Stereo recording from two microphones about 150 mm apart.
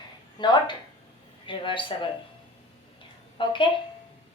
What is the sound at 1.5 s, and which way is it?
Speech, 35° left (ahead or behind).